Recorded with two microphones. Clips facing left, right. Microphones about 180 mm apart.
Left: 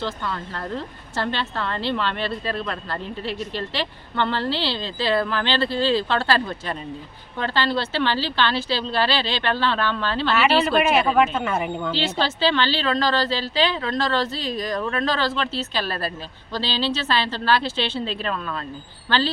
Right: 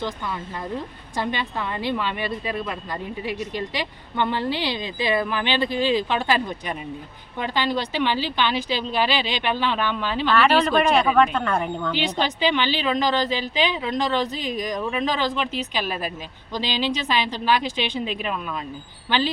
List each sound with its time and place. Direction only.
0.0 s speech: 10° right (ahead or behind)
10.3 s speech: 5° left (ahead or behind)
11.9 s speech: 15° right (ahead or behind)